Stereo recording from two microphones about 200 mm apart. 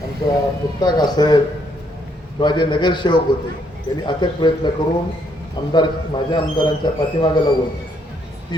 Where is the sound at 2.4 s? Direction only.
20° left (ahead or behind).